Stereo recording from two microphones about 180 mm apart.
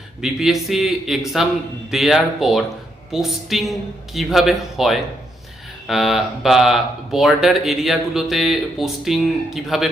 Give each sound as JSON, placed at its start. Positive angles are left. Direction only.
{"t": 0.2, "sound": "speech", "side_deg": 0}